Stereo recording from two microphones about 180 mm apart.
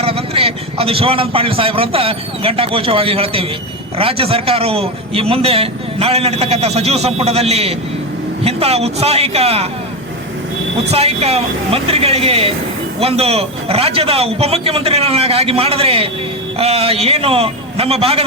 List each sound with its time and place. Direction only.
0.0 s a man's voice: 35° right (ahead or behind)
10.9 s a man's voice: 35° right (ahead or behind)